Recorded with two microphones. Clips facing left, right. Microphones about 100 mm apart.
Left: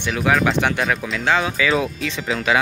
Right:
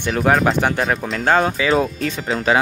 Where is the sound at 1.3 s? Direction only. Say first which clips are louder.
Right 3 dB; 45° right (ahead or behind).